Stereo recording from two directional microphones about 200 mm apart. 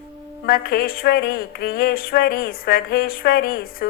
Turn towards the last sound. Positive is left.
turn(degrees=50)  # may be behind; listen again after turning